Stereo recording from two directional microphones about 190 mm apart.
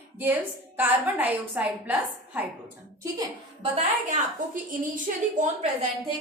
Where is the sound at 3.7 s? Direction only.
40° right (ahead or behind).